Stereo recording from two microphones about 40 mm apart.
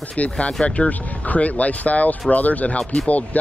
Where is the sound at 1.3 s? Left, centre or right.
Left.